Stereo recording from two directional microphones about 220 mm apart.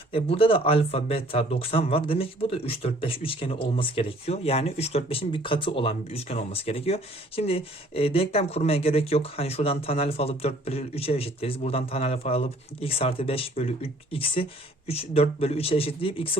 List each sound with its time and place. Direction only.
0.1 s speech: 25° left (ahead or behind)